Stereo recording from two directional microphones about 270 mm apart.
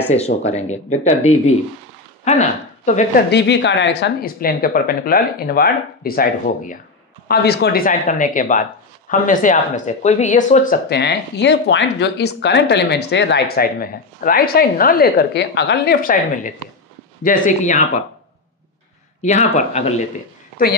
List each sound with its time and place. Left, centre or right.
0.1 s speech: left
3.3 s speech: left
19.2 s speech: left